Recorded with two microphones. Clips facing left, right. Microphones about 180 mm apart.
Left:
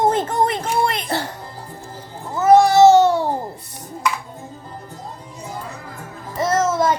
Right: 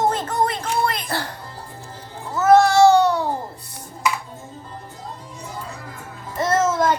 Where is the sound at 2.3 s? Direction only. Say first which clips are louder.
Left 2 dB; 10° left (ahead or behind).